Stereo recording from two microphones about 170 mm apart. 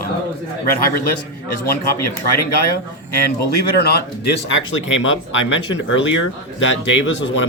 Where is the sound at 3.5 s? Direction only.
65° left (ahead or behind); by 7.0 s 90° left.